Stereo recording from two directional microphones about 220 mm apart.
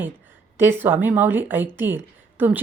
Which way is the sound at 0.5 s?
10° right (ahead or behind).